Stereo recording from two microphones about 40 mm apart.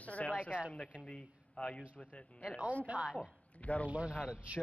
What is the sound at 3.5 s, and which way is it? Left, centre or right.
Speech, left.